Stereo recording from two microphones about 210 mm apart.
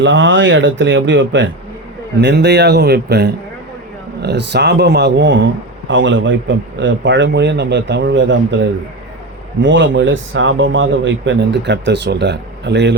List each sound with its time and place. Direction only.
0.0 s a man's voice: 65° right (ahead or behind)